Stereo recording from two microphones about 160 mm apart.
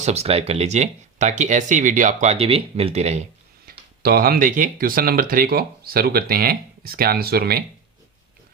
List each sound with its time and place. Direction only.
0.0 s speech: 40° right (ahead or behind)
3.7 s speech: 70° right (ahead or behind)